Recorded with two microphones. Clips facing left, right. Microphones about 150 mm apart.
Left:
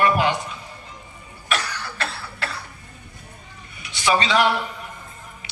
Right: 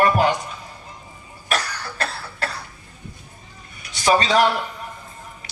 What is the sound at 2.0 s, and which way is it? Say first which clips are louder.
Cough: right 3 dB; 40° right (ahead or behind).